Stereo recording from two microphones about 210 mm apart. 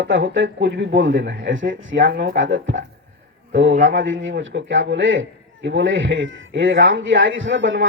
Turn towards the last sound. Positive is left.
turn(degrees=-65)  # may be behind; listen again after turning